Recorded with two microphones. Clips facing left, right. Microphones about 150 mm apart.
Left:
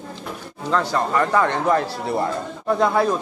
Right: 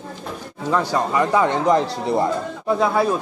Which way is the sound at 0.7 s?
10° right (ahead or behind).